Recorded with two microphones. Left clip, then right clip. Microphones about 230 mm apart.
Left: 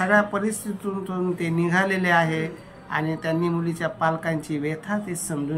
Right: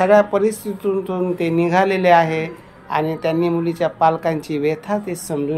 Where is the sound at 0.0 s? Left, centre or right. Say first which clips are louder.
Right 7 dB; centre.